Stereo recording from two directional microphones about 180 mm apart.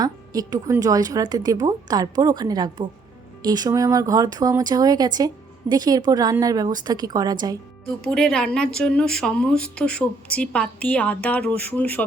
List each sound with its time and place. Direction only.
0.0 s speech: 20° right (ahead or behind)
8.0 s a woman's voice: 5° left (ahead or behind)